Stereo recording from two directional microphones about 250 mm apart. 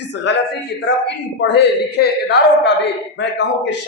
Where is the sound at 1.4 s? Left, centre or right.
Left.